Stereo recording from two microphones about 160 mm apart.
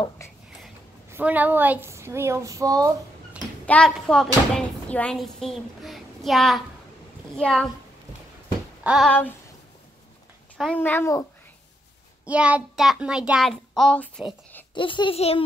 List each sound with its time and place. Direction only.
1.1 s a woman's voice: 10° right (ahead or behind)
3.6 s speech: 5° left (ahead or behind)
8.8 s a sound: 5° right (ahead or behind)
10.6 s a child's voice: 10° left (ahead or behind)
12.3 s speech: 10° right (ahead or behind)
14.7 s a child's voice: 30° left (ahead or behind)